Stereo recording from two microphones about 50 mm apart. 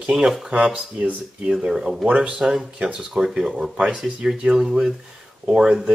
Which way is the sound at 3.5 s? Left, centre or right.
Right.